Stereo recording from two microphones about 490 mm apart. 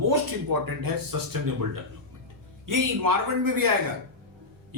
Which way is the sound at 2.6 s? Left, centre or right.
Right.